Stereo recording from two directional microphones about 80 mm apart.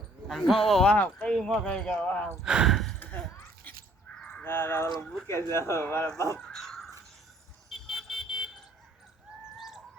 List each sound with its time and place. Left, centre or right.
0.3 s speech: centre
0.9 s speech: centre
1.3 s speech: centre
2.4 s speech: centre
4.4 s speech: left
6.4 s crow: centre
7.7 s a sound: centre
9.6 s chicken: centre